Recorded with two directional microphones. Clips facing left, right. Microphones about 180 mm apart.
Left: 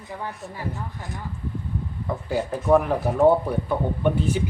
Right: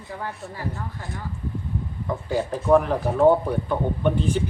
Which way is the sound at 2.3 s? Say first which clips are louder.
Right 1 dB; 5° left (ahead or behind).